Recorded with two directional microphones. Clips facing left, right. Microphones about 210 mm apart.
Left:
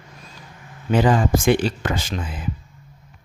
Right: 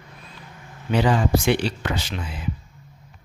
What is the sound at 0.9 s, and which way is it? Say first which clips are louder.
Speech: left 2 dB; 50° left (ahead or behind).